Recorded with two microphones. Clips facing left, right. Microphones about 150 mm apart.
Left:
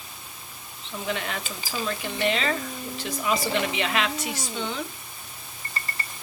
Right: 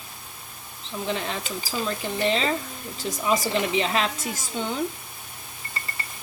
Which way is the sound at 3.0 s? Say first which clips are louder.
Right 2 dB; 40° right (ahead or behind).